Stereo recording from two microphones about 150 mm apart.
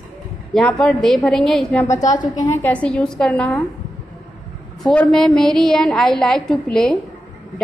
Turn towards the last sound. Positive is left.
turn(degrees=5)  # may be behind; listen again after turning